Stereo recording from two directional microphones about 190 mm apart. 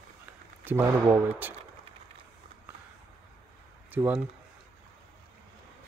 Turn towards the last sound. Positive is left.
turn(degrees=-10)  # may be behind; listen again after turning